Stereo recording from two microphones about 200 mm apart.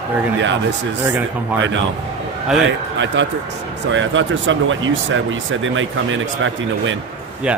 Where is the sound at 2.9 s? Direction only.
65° right (ahead or behind).